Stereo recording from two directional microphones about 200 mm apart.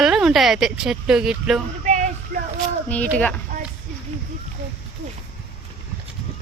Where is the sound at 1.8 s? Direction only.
35° right (ahead or behind).